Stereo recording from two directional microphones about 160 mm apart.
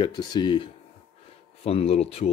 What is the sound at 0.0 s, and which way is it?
Speech, 25° left (ahead or behind).